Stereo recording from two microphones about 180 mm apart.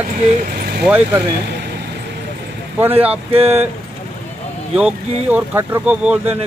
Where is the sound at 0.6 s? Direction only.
60° right (ahead or behind).